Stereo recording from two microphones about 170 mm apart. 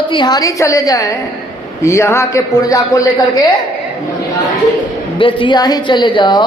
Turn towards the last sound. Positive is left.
turn(degrees=25)  # may be behind; listen again after turning